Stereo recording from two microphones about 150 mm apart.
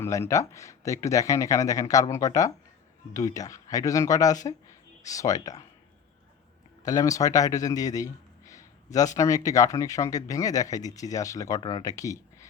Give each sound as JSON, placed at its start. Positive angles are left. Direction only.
{"t": 0.0, "sound": "speech", "side_deg": 20}
{"t": 6.8, "sound": "speech", "side_deg": 25}